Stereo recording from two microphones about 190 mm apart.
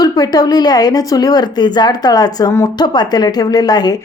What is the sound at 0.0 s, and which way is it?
Speech, 20° left (ahead or behind).